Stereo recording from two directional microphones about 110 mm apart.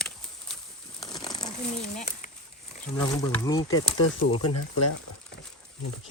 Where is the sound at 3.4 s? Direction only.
35° left (ahead or behind).